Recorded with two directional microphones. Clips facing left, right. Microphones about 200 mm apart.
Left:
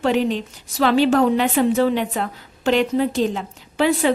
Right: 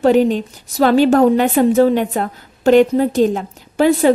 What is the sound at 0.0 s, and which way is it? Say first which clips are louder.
A woman's voice: right 7 dB; 45° right (ahead or behind).